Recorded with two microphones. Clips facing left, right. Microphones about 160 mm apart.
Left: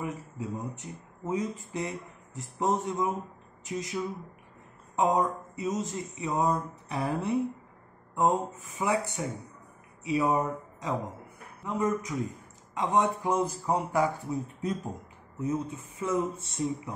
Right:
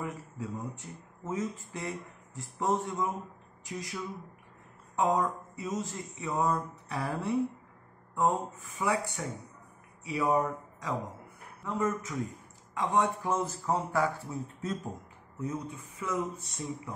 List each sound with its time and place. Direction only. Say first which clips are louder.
0.0 s speech: left 2 dB; 20° left (ahead or behind)